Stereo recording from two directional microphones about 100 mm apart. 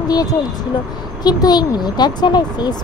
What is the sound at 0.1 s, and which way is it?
Speech, 40° left (ahead or behind).